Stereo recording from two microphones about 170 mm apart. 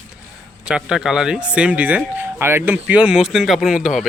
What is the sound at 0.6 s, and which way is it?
Speech, 5° right (ahead or behind).